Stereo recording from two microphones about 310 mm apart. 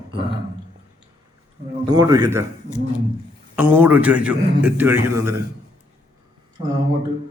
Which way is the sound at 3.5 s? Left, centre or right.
Centre.